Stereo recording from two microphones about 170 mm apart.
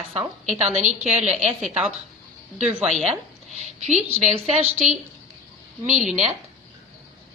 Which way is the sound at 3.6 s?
40° right (ahead or behind).